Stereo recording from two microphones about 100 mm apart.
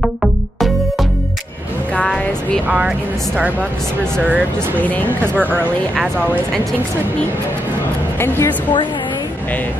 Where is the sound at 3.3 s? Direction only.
15° right (ahead or behind).